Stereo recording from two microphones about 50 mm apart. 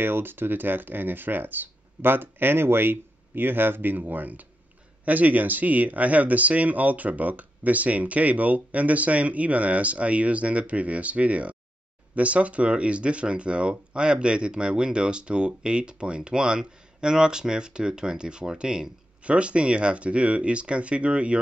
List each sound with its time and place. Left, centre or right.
0.0 s speech: right